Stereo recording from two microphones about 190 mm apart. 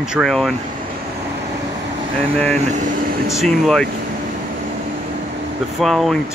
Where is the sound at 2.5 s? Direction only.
40° right (ahead or behind).